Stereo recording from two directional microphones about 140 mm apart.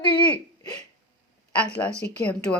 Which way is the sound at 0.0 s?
35° left (ahead or behind).